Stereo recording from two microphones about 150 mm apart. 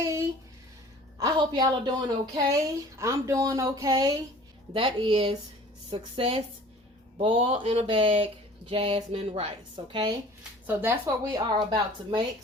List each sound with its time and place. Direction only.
0.0 s a sound: 20° right (ahead or behind)
1.2 s speech: 30° right (ahead or behind)
4.7 s a woman's voice: 35° right (ahead or behind)
10.7 s speech: 15° right (ahead or behind); by 12.2 s 30° right (ahead or behind)